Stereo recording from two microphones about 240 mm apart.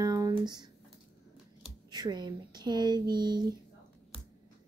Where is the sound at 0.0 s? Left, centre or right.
Centre.